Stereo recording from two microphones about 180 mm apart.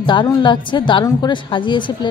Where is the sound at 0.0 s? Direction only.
25° left (ahead or behind).